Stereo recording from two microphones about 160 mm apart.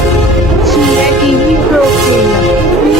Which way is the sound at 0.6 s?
Centre (ahead or behind).